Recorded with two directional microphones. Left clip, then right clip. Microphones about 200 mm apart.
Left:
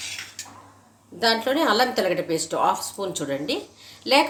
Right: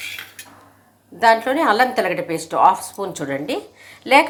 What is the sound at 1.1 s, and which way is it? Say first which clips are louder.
Speech: right 6 dB; 25° right (ahead or behind).